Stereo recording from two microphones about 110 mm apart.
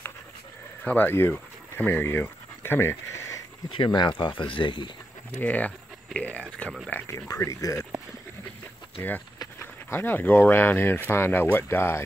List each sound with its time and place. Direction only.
0.8 s speech: 15° left (ahead or behind)
3.7 s speech: 45° left (ahead or behind)
5.4 s speech: 15° left (ahead or behind)
7.1 s speech: 25° left (ahead or behind)
9.6 s speech: 20° left (ahead or behind)